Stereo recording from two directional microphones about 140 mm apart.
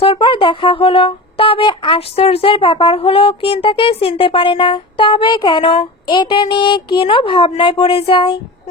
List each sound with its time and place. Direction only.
0.0 s speech: 40° left (ahead or behind)